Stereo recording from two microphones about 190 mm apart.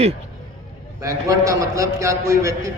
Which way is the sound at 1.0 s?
15° right (ahead or behind).